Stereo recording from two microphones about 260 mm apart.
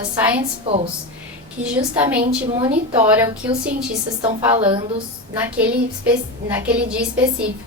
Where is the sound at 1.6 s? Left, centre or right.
Centre.